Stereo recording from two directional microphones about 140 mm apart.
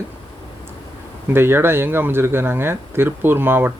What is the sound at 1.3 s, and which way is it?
Speech, 15° right (ahead or behind).